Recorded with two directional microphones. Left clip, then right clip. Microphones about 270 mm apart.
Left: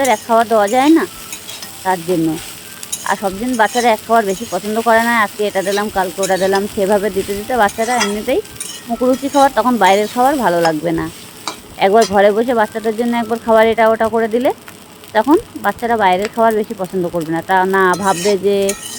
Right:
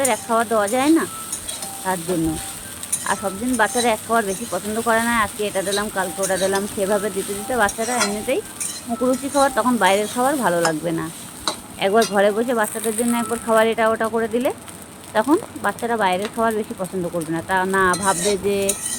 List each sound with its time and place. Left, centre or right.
0.0 s speech: left
3.1 s speech: left